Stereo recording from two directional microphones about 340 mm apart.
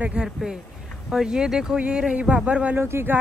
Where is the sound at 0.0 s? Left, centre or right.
Centre.